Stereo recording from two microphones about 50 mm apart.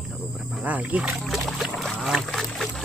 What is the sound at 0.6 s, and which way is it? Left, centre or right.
Speech, right.